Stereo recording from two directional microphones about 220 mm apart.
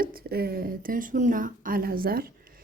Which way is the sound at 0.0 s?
45° right (ahead or behind).